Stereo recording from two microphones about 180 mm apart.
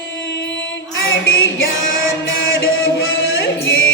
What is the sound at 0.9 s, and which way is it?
Music, 90° left.